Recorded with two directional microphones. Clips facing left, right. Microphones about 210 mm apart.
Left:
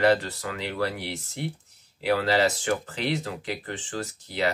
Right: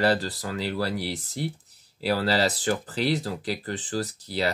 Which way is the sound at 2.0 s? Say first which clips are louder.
Left 1 dB; 35° right (ahead or behind).